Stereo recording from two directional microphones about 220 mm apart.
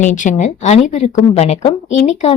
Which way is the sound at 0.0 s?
35° left (ahead or behind).